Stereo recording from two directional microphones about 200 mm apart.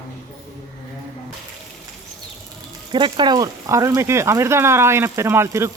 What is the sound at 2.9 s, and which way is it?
Speech, 25° right (ahead or behind).